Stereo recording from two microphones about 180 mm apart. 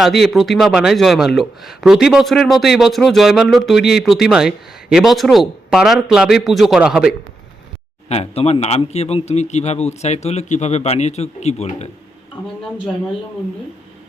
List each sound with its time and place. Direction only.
0.0 s speech: centre (ahead or behind)
8.1 s a man's voice: 35° left (ahead or behind)